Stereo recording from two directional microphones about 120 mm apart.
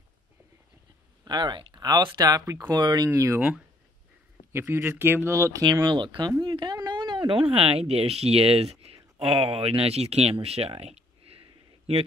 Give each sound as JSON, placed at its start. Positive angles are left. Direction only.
{"t": 1.2, "sound": "speech", "side_deg": -35}
{"t": 4.5, "sound": "speech", "side_deg": -25}
{"t": 5.9, "sound": "speech", "side_deg": -40}